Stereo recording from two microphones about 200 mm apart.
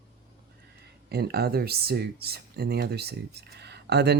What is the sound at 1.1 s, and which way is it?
Speech, 55° right (ahead or behind).